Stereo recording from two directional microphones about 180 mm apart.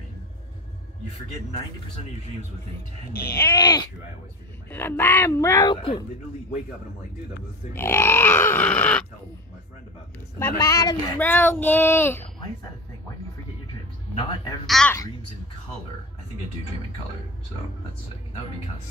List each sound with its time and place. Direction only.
3.3 s speech: 20° left (ahead or behind)
7.7 s speech: 15° left (ahead or behind)
10.4 s speech: 20° left (ahead or behind)
14.1 s speech: 25° left (ahead or behind)
14.7 s speech: 5° left (ahead or behind)